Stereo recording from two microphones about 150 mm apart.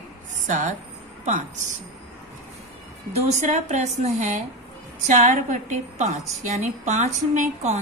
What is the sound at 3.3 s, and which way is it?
A woman's voice, 55° right (ahead or behind).